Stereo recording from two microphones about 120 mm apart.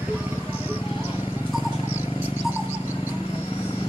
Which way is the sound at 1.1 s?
35° left (ahead or behind).